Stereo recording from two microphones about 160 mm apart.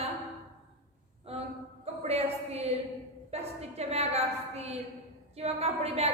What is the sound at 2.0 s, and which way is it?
A woman's voice, 40° right (ahead or behind).